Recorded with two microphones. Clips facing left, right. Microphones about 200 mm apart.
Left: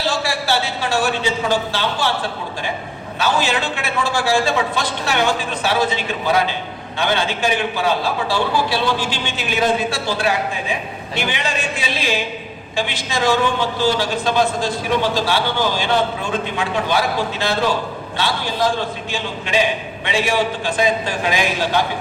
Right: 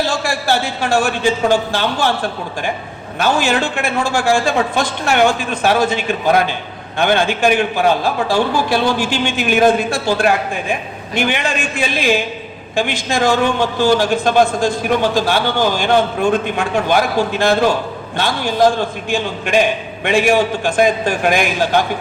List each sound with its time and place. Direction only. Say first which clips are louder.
0.0 s a man's voice: right 3 dB; 45° right (ahead or behind)